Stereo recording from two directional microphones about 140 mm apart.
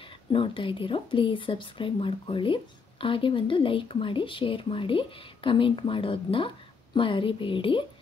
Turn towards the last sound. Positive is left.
turn(degrees=40)  # may be behind; listen again after turning